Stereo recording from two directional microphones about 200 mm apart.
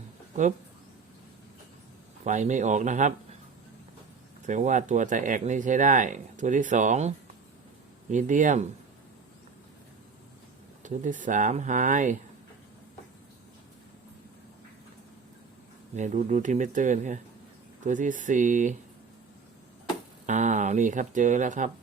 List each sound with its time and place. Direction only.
2.2 s speech: 35° right (ahead or behind)
4.4 s speech: 40° right (ahead or behind)
8.1 s speech: 40° right (ahead or behind)
10.8 s speech: 40° right (ahead or behind)
16.0 s speech: 35° right (ahead or behind)
20.2 s speech: 35° right (ahead or behind)